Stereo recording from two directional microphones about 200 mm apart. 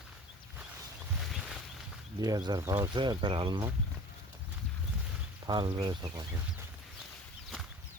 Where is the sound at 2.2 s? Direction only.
20° right (ahead or behind).